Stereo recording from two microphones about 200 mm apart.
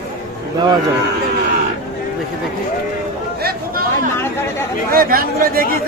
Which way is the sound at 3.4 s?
50° right (ahead or behind).